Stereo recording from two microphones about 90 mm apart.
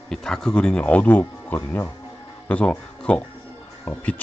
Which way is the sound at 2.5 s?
10° left (ahead or behind).